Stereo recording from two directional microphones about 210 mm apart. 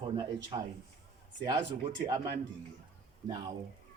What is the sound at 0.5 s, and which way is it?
Speech, 25° right (ahead or behind).